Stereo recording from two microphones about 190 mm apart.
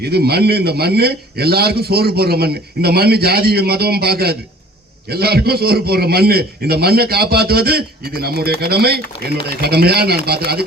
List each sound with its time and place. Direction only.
0.0 s a man's voice: 55° right (ahead or behind)